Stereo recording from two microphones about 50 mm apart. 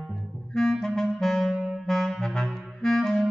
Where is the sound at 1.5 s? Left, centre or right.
Centre.